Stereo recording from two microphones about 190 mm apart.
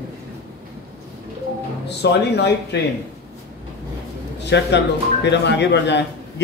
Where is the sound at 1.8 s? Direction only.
60° left (ahead or behind).